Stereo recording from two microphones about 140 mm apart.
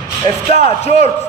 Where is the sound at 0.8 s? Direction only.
55° left (ahead or behind).